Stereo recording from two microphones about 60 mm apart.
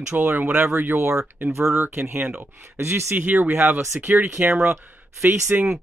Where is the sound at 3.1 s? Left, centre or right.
Right.